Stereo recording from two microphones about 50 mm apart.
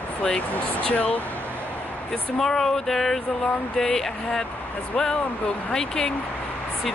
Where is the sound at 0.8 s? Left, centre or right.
Left.